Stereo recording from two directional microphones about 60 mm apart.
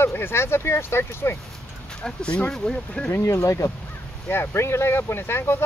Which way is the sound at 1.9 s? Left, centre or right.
Centre.